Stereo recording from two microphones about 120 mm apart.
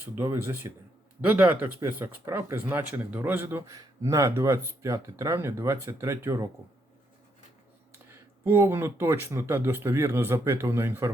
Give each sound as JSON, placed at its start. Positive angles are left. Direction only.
{"t": 0.0, "sound": "speech", "side_deg": -20}
{"t": 8.1, "sound": "speech", "side_deg": -20}